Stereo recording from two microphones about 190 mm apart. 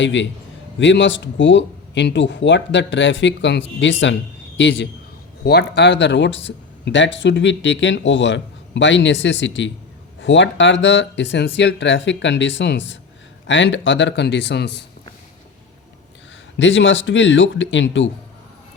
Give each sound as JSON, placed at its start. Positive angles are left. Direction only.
{"t": 0.0, "sound": "speech", "side_deg": 70}
{"t": 5.5, "sound": "speech", "side_deg": 60}
{"t": 16.6, "sound": "speech", "side_deg": 80}